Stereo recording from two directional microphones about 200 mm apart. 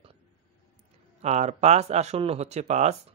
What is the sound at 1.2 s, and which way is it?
Speech, 35° right (ahead or behind).